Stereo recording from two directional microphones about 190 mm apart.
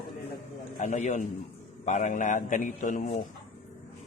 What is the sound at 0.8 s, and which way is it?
A man's voice, 40° left (ahead or behind).